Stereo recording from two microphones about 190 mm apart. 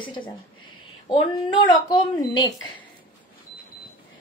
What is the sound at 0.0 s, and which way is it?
Speech, 25° left (ahead or behind).